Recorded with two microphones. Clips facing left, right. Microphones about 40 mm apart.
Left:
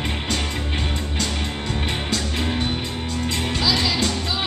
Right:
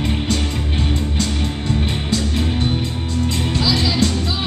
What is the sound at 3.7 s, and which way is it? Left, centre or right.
Music, left.